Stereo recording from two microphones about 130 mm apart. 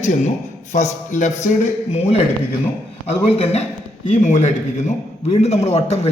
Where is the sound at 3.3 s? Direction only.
55° left (ahead or behind).